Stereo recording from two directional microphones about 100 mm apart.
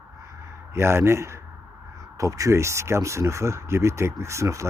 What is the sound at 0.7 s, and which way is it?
Speech, 25° right (ahead or behind).